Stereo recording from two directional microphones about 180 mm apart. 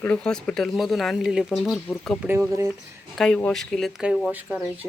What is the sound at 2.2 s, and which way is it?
Speech, 10° right (ahead or behind).